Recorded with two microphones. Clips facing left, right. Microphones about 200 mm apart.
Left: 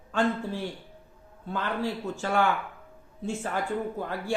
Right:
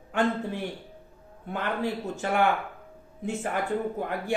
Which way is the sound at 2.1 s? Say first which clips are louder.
Right 1 dB; 20° right (ahead or behind).